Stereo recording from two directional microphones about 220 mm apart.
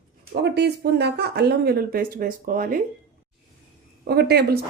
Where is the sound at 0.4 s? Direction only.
50° right (ahead or behind).